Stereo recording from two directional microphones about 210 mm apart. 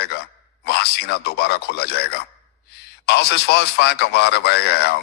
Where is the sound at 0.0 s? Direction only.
50° left (ahead or behind).